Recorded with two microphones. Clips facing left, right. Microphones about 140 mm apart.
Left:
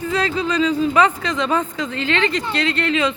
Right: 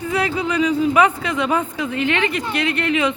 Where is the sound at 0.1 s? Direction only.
10° right (ahead or behind).